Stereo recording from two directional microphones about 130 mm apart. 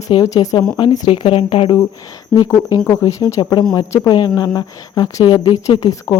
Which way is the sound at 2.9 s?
25° left (ahead or behind).